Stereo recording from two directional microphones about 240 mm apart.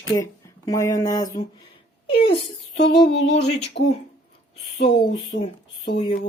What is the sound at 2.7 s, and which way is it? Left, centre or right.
Speech, left.